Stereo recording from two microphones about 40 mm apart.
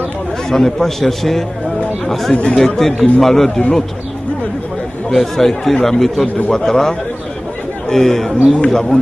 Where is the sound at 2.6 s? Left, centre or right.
Centre.